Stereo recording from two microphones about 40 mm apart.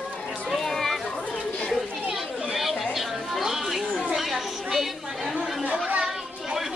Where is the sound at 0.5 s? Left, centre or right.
Centre.